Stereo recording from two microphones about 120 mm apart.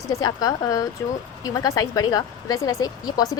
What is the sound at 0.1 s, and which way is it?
A woman's voice, 30° left (ahead or behind).